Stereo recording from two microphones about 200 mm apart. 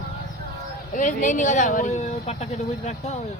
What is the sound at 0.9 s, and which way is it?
Speech, 40° left (ahead or behind).